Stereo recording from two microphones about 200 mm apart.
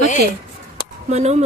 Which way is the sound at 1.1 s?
35° right (ahead or behind).